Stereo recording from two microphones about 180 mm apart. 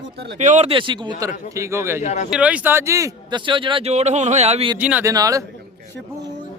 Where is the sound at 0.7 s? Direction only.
25° right (ahead or behind).